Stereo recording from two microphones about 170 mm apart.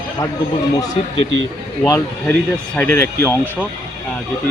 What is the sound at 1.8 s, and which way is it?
A man's voice, 20° left (ahead or behind).